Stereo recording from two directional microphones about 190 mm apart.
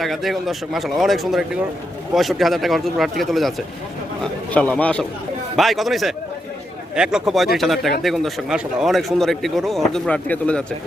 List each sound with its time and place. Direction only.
0.0 s a man's voice: centre (ahead or behind)